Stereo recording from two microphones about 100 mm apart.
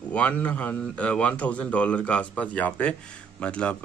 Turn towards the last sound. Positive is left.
turn(degrees=10)  # may be behind; listen again after turning